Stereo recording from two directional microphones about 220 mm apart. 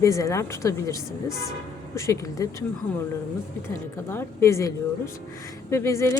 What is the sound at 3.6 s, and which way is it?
Speech, 10° left (ahead or behind).